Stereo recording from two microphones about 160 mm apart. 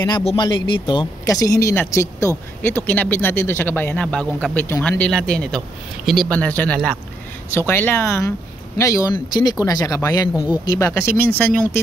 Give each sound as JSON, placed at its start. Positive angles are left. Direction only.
{"t": 0.0, "sound": "speech", "side_deg": 35}
{"t": 1.2, "sound": "speech", "side_deg": 20}
{"t": 10.9, "sound": "speech", "side_deg": 15}